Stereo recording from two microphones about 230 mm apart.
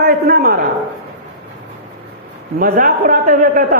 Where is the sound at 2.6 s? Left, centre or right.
Right.